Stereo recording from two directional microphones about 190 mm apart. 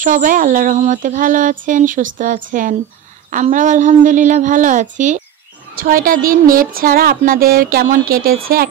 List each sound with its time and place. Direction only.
0.0 s a woman's voice: 45° right (ahead or behind)